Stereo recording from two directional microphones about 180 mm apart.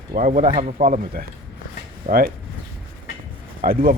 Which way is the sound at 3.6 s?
50° right (ahead or behind).